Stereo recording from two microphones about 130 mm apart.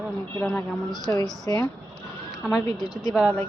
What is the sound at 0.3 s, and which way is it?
Speech, 10° left (ahead or behind).